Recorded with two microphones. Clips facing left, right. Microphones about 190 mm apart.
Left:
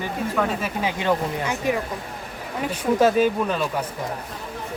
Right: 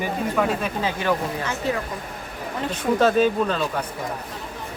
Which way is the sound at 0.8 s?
20° left (ahead or behind).